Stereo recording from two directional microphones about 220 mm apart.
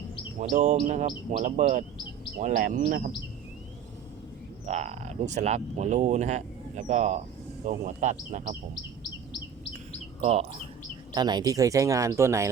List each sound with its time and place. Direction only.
0.3 s speech: 35° right (ahead or behind)
4.6 s speech: 30° right (ahead or behind)
11.1 s speech: 20° right (ahead or behind)